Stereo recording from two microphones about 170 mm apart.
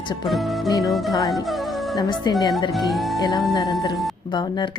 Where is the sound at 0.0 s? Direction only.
25° left (ahead or behind).